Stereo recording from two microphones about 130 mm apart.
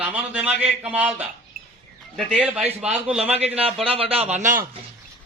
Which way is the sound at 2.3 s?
5° right (ahead or behind).